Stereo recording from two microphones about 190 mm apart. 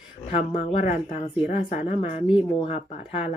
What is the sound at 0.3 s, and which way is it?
Speech, 40° left (ahead or behind).